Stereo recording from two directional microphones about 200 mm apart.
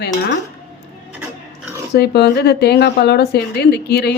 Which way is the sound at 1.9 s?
55° left (ahead or behind).